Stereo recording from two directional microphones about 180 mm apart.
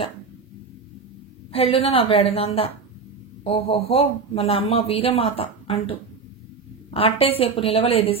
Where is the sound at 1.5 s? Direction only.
35° left (ahead or behind).